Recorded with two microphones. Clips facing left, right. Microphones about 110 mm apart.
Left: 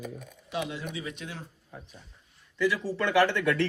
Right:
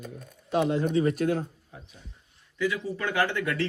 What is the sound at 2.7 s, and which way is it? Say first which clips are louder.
Speech: left 5 dB; 75° left (ahead or behind).